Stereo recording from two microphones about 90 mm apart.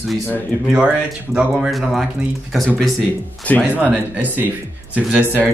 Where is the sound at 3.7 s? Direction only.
20° right (ahead or behind).